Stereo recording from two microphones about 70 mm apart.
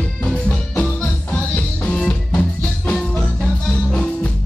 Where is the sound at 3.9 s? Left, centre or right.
Centre.